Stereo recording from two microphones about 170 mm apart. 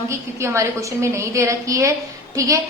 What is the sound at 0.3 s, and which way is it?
A woman's voice, 15° right (ahead or behind).